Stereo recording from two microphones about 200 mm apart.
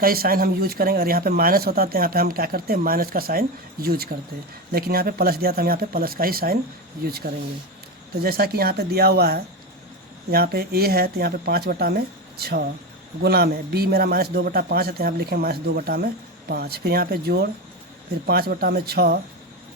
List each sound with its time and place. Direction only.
0.0 s speech: 50° right (ahead or behind)